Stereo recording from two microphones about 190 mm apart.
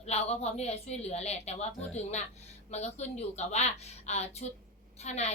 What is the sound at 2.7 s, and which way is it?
A woman's voice, 35° left (ahead or behind).